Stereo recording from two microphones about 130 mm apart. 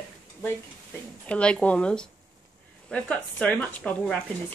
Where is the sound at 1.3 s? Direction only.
10° left (ahead or behind).